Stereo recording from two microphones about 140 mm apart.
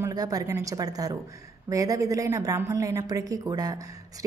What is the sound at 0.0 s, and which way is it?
A woman's voice, 25° right (ahead or behind).